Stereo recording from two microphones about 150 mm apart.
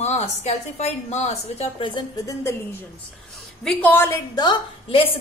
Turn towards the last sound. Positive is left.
turn(degrees=35)  # may be behind; listen again after turning